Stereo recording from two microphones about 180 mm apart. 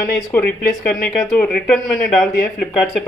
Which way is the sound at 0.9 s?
Centre (ahead or behind).